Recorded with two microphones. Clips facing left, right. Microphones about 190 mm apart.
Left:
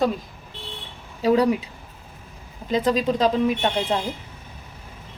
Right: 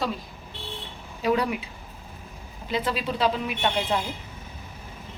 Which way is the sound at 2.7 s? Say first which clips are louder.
Left 7 dB; 40° left (ahead or behind).